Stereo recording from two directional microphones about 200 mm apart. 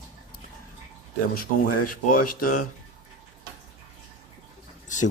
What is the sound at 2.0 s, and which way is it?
Speech, 45° left (ahead or behind).